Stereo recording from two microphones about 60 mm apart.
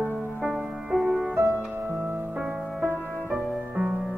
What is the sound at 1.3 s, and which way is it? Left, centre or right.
Music, right.